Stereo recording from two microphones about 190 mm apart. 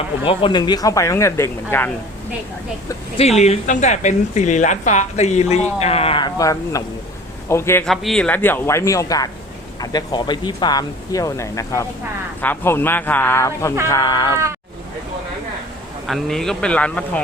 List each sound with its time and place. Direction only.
0.3 s speech: 25° left (ahead or behind)
3.2 s a woman's voice: 35° left (ahead or behind); by 7.9 s 15° left (ahead or behind)
7.9 s speech: centre (ahead or behind); by 14.3 s 25° left (ahead or behind)
16.0 s speech: centre (ahead or behind)